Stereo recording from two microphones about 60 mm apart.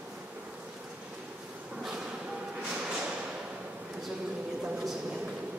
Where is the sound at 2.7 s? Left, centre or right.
Centre.